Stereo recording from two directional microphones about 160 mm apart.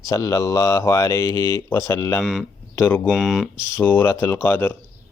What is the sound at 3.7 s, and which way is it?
Speech, 10° left (ahead or behind).